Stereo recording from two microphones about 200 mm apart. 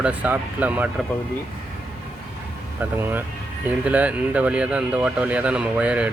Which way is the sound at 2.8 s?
10° right (ahead or behind).